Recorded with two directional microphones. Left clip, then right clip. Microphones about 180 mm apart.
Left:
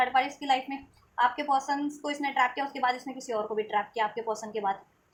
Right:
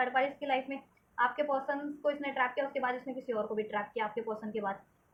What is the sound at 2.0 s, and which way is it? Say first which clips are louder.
A woman's voice: left 3 dB; 35° left (ahead or behind).